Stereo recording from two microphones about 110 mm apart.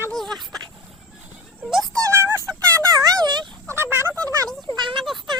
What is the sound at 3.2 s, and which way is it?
Turkey, 40° right (ahead or behind).